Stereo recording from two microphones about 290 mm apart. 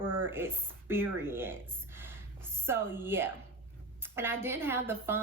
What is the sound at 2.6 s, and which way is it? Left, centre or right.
A woman's voice, centre.